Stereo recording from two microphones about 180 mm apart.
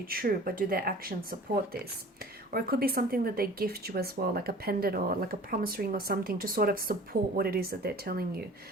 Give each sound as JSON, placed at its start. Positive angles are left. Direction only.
{"t": 0.0, "sound": "speech", "side_deg": -55}